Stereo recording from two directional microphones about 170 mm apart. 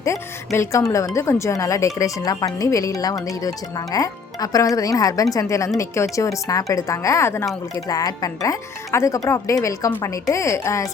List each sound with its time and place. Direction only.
0.0 s speech: 15° left (ahead or behind)